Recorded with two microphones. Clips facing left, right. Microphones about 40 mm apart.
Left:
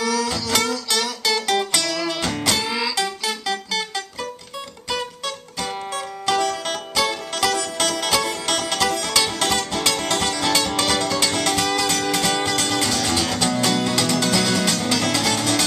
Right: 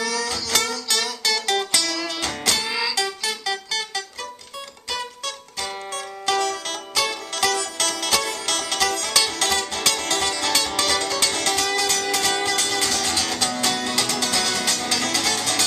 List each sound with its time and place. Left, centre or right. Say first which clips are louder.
0.0 s music: left 3 dB; centre